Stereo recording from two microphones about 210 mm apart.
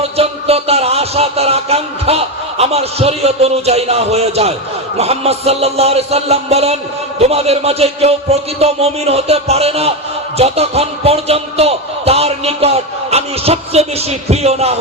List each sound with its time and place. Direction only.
0.0 s speech: 30° right (ahead or behind)